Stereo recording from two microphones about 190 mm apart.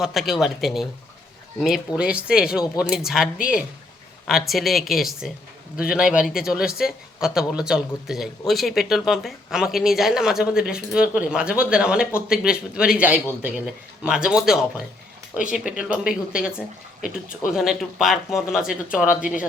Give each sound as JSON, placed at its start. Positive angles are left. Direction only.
{"t": 0.0, "sound": "speech", "side_deg": 0}
{"t": 14.3, "sound": "speech", "side_deg": -5}
{"t": 17.0, "sound": "speech", "side_deg": 45}
{"t": 17.5, "sound": "speech", "side_deg": 0}